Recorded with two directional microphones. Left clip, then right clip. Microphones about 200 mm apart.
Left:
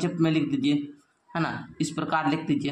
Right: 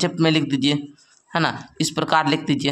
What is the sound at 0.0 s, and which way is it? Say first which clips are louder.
A man's voice: right 6 dB; 40° right (ahead or behind).